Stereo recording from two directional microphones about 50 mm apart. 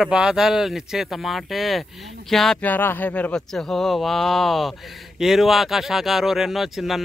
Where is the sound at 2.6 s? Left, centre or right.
Left.